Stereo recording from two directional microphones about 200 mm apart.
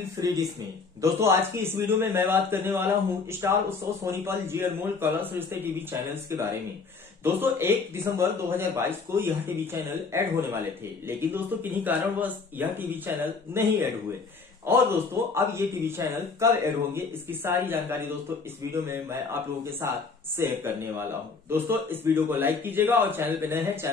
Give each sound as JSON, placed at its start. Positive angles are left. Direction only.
{"t": 1.0, "sound": "speech", "side_deg": -10}